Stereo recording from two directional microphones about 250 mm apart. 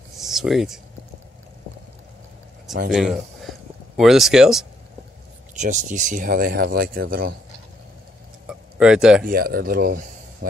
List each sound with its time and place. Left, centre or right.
0.2 s a sound: centre
2.9 s speech: centre
5.6 s speech: right
8.5 s tick-tock: centre
9.2 s speech: right